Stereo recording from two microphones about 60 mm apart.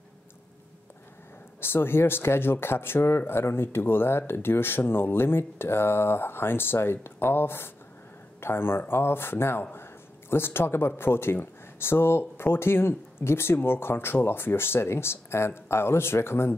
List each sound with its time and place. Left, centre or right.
1.6 s speech: left